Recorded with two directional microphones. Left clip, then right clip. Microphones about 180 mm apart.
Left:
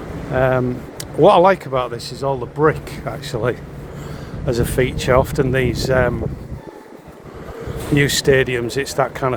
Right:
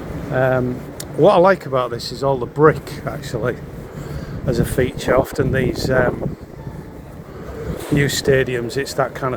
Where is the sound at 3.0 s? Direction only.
25° left (ahead or behind).